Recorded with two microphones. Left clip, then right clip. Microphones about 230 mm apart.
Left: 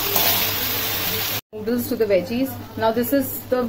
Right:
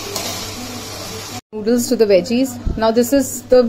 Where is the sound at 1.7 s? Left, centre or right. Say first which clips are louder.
Right 7 dB; right.